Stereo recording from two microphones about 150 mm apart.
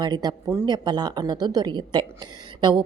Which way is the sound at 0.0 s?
30° right (ahead or behind).